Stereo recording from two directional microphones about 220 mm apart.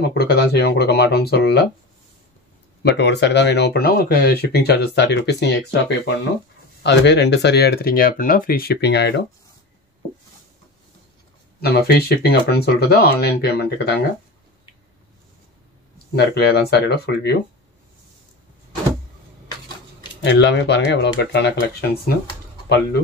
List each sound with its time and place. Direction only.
0.0 s speech: 45° left (ahead or behind)
2.8 s speech: 50° left (ahead or behind)
11.6 s speech: 45° left (ahead or behind)
16.2 s speech: 45° left (ahead or behind)
20.2 s speech: 50° left (ahead or behind)